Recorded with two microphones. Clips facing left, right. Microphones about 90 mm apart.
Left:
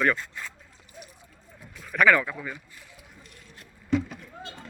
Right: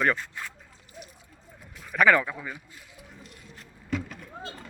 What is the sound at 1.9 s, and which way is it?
Speech, 25° right (ahead or behind).